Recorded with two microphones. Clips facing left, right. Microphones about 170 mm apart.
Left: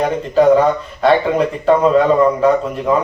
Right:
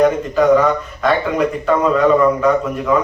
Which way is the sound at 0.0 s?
30° left (ahead or behind).